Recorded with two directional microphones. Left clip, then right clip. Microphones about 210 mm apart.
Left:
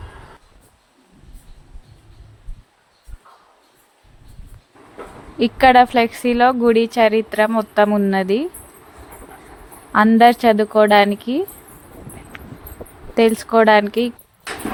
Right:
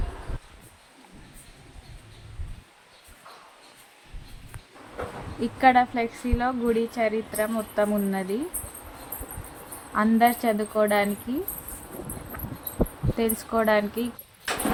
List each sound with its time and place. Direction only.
5.4 s speech: 40° left (ahead or behind)
9.9 s speech: 35° left (ahead or behind)
13.1 s speech: 35° left (ahead or behind)